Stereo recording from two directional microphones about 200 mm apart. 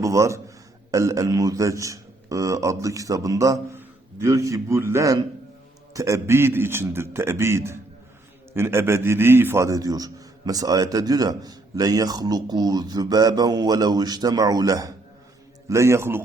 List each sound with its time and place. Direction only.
0.0 s a man's voice: 15° right (ahead or behind)